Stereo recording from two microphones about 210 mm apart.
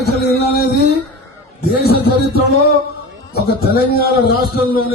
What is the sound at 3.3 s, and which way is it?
A man's voice, 45° left (ahead or behind).